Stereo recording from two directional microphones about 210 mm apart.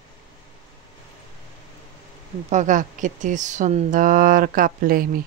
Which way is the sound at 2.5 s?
35° right (ahead or behind).